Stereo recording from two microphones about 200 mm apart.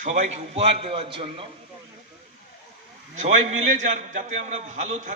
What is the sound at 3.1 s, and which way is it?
A man's voice, 35° right (ahead or behind).